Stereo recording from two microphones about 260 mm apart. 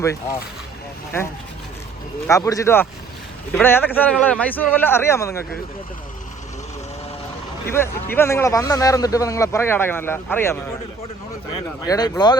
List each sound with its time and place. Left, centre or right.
0.0 s a man's voice: centre
2.2 s a man's voice: centre
7.7 s a man's voice: centre
11.9 s a man's voice: centre